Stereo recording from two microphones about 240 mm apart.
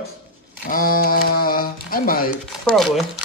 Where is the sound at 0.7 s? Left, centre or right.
Left.